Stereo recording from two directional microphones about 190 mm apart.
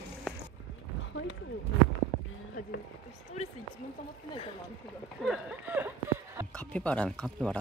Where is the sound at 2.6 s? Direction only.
45° left (ahead or behind).